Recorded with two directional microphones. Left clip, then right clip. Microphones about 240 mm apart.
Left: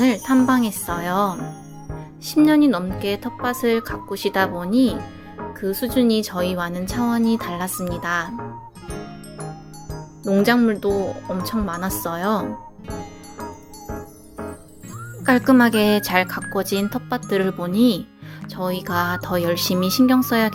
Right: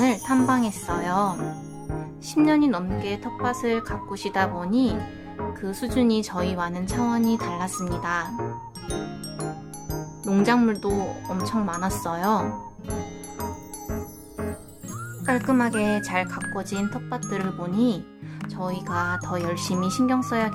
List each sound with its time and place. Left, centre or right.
0.0 s jingle bell: centre
2.2 s speech: centre
10.2 s speech: centre
15.2 s speech: centre